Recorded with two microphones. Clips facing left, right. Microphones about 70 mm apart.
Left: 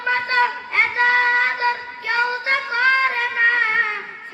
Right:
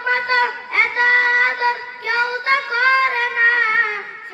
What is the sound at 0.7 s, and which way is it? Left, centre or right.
Child singing, right.